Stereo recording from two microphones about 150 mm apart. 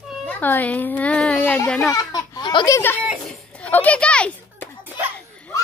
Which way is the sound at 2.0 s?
25° left (ahead or behind).